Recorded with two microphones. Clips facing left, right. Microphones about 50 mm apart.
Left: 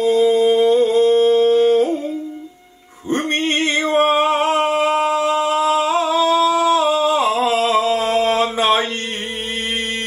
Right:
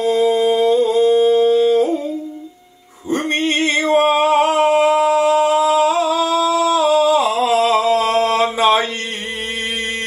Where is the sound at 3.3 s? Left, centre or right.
Left.